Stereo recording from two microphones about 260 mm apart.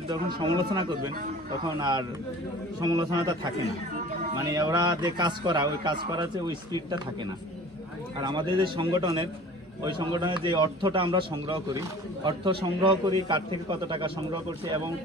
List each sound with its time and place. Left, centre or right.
0.4 s a man's voice: centre